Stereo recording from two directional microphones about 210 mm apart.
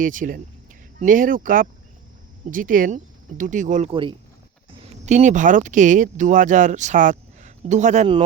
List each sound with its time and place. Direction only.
0.0 s speech: 40° right (ahead or behind)